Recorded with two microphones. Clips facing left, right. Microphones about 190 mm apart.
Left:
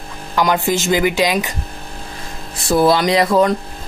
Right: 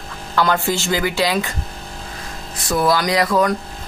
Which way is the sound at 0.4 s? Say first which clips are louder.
Left 2 dB; 15° left (ahead or behind).